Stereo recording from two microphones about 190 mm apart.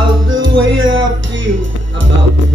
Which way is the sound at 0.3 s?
90° right.